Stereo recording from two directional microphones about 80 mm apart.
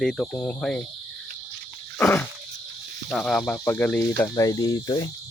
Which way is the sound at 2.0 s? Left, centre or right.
Centre.